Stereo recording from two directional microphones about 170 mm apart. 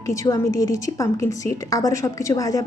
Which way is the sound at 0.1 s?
20° left (ahead or behind).